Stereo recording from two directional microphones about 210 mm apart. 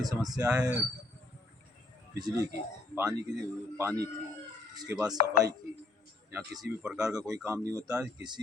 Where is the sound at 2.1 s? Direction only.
20° right (ahead or behind).